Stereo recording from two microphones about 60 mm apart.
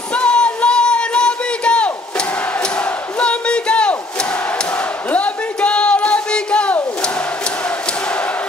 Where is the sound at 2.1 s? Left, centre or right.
Left.